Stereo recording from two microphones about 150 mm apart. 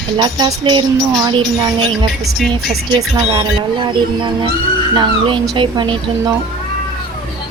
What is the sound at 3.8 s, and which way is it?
Speech, 30° right (ahead or behind).